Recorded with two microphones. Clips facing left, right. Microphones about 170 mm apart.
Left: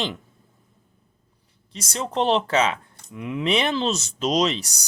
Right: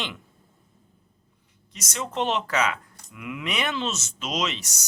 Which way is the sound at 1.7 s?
30° left (ahead or behind).